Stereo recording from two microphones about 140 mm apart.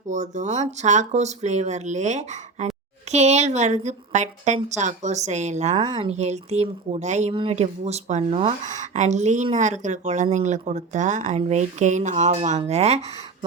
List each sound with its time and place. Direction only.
0.1 s speech: 60° right (ahead or behind)
5.7 s speech: 35° right (ahead or behind)
6.1 s a woman's voice: 50° right (ahead or behind)
7.3 s speech: 45° right (ahead or behind)